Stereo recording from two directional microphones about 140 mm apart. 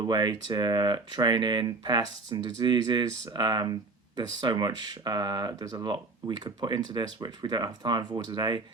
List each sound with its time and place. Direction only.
0.0 s speech: 30° right (ahead or behind)